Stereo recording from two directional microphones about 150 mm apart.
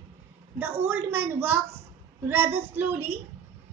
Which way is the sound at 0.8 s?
15° right (ahead or behind).